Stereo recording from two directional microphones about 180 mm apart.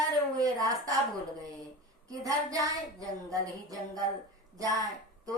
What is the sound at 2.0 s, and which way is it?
Speech, 20° right (ahead or behind).